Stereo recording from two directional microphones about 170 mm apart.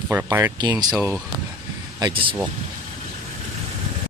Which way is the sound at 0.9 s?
10° right (ahead or behind).